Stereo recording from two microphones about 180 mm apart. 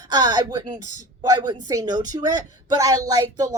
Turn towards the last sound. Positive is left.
turn(degrees=-20)  # may be behind; listen again after turning